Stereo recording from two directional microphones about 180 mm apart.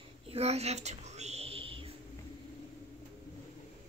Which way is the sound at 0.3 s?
35° right (ahead or behind).